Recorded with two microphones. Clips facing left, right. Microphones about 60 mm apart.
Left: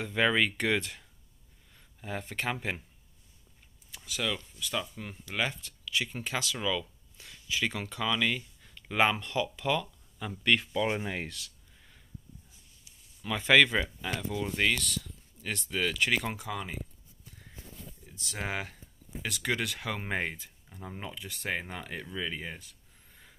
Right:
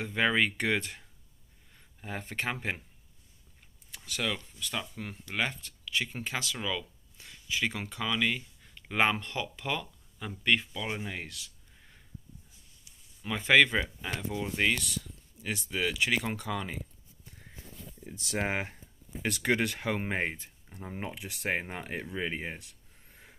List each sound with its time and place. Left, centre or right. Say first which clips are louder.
0.0 s speech: left 1 dB; right
3.9 s speech: even; right
5.3 s speech: even; right; by 10.7 s centre
10.7 s speech: left 6 dB; left
13.2 s speech: even; right; by 16.7 s centre
18.4 s speech: right 2 dB; right
23.0 s a sound: right 2 dB; right